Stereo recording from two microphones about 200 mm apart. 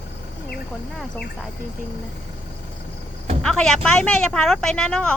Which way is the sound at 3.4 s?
5° left (ahead or behind).